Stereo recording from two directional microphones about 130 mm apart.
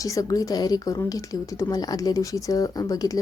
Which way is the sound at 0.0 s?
25° left (ahead or behind).